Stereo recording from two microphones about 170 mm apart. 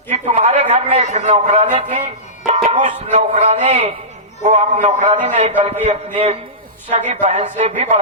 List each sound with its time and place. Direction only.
0.1 s a man's voice: 40° right (ahead or behind)